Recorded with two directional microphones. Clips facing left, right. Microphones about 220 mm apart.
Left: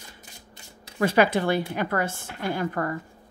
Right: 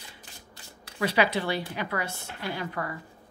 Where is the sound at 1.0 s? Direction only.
50° left (ahead or behind).